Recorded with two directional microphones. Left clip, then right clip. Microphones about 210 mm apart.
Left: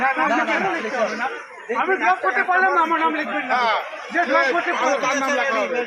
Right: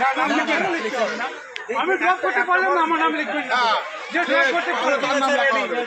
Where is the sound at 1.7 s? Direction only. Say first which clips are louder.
Left 1 dB; 40° right (ahead or behind).